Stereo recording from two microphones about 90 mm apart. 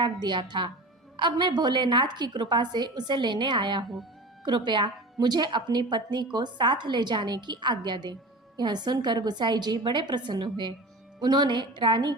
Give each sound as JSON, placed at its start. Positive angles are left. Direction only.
{"t": 0.0, "sound": "a woman's voice", "side_deg": -60}